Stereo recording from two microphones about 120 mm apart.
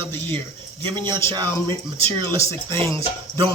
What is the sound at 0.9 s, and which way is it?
A man's voice, 20° left (ahead or behind).